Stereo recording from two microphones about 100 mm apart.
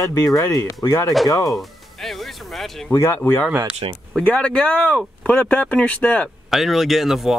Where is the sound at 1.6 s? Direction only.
Centre (ahead or behind).